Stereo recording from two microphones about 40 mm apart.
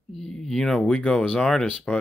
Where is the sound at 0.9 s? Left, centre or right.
Left.